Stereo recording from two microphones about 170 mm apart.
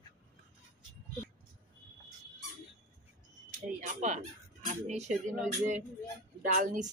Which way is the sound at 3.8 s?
45° right (ahead or behind).